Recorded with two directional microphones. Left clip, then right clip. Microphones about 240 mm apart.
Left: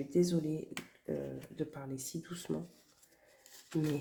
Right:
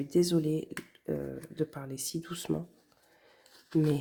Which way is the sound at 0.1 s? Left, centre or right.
Right.